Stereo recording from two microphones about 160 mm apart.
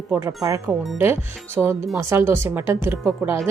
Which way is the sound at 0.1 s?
15° right (ahead or behind).